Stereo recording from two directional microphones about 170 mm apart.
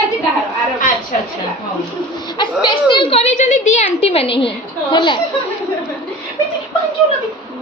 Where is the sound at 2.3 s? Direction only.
25° left (ahead or behind).